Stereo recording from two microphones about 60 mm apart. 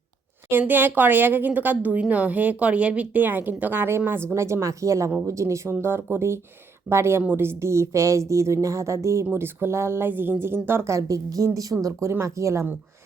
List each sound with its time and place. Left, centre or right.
0.7 s a woman's voice: right
4.4 s a woman's voice: right
5.8 s a woman's voice: right
9.3 s speech: right
10.1 s speech: right
10.8 s a woman's voice: right